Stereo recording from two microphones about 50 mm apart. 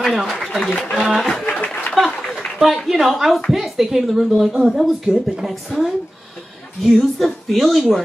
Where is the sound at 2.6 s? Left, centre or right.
Centre.